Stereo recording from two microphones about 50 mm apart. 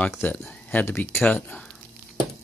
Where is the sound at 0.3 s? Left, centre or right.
Left.